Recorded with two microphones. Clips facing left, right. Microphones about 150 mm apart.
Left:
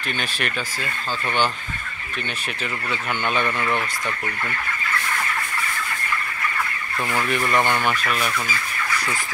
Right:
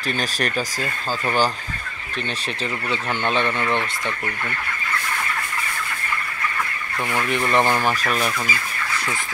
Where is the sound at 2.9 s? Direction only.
30° right (ahead or behind).